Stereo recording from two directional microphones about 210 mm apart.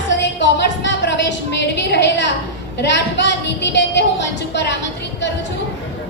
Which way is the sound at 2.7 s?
55° left (ahead or behind).